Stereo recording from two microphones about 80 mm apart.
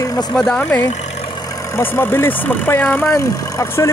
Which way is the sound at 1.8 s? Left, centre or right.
Left.